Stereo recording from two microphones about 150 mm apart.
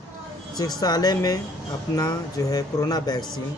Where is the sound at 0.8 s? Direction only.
25° left (ahead or behind).